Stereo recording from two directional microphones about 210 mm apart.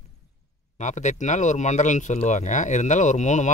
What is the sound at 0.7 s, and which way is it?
Speech, 35° left (ahead or behind).